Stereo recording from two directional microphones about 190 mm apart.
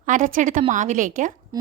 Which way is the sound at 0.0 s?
40° right (ahead or behind).